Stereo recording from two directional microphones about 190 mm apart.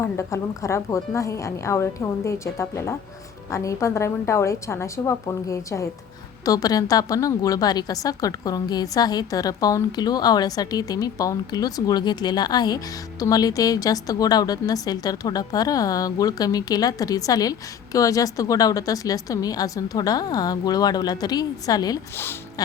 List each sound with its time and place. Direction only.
0.0 s a woman's voice: 15° left (ahead or behind)